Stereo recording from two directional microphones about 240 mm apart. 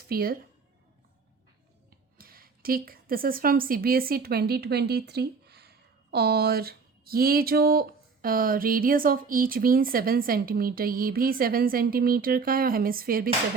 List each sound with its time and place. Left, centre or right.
0.1 s a woman's voice: right
2.1 s a woman's voice: right